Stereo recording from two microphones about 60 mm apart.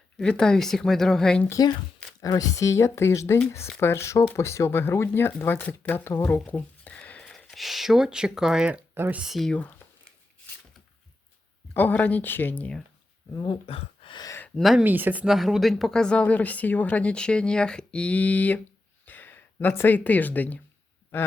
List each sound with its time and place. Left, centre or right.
0.2 s speech: centre
1.6 s speech: left
2.2 s speech: left
6.9 s a sound: left
7.3 s speech: centre
9.5 s speech: left
11.7 s speech: left
14.6 s speech: centre
14.8 s speech: right
15.3 s speech: centre; by 18.6 s left
19.0 s a sound: left
19.9 s speech: left
21.1 s a sound: left